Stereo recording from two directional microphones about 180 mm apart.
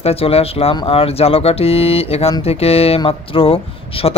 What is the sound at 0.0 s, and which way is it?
Speech, 35° left (ahead or behind).